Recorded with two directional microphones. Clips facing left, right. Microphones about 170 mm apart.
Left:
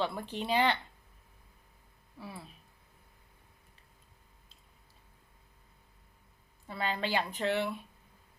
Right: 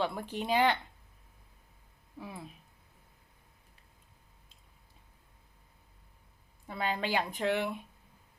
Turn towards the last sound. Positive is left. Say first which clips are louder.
# even
turn(degrees=-15)  # may be behind; listen again after turning